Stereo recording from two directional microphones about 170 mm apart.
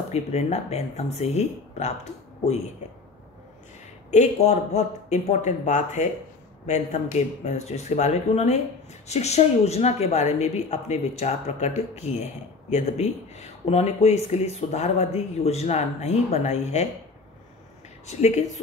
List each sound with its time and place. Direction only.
0.1 s speech: 40° left (ahead or behind)
4.1 s speech: 40° left (ahead or behind)
18.0 s speech: 40° left (ahead or behind)